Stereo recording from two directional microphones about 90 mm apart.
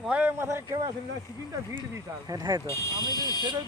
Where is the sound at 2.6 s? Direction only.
35° left (ahead or behind).